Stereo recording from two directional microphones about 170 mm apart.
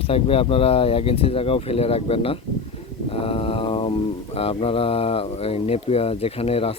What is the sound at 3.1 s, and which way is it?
Mantra, 35° left (ahead or behind).